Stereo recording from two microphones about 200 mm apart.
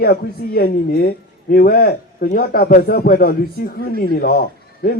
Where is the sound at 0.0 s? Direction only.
50° left (ahead or behind).